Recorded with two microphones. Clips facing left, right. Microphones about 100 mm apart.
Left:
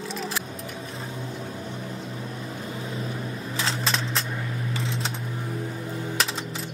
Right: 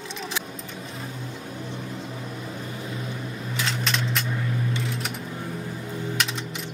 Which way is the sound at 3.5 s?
30° left (ahead or behind).